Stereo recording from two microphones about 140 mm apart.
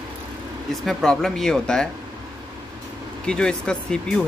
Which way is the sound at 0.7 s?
Centre (ahead or behind).